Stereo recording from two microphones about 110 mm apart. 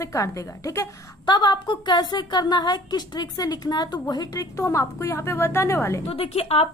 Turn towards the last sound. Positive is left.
turn(degrees=60)  # may be behind; listen again after turning